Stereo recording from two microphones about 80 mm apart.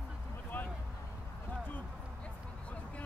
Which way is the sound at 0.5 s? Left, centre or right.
Left.